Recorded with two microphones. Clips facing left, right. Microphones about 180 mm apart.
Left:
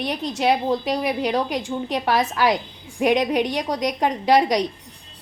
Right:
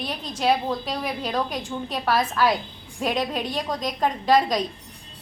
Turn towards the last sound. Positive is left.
turn(degrees=20)  # may be behind; listen again after turning